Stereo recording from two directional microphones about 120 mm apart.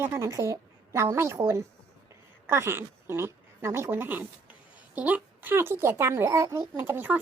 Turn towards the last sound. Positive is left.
turn(degrees=-15)  # may be behind; listen again after turning